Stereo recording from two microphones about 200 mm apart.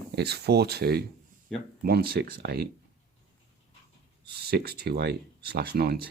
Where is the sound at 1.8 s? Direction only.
50° right (ahead or behind).